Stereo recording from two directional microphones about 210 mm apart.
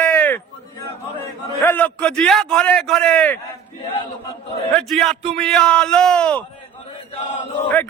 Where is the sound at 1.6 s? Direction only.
10° left (ahead or behind).